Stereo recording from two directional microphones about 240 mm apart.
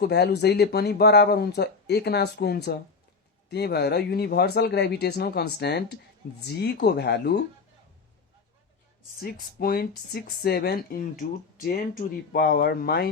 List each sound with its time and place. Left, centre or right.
0.0 s speech: left
9.2 s speech: left